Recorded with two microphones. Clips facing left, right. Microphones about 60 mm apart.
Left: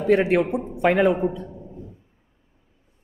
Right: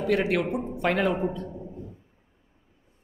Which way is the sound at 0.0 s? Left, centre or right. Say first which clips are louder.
Left 6 dB; left.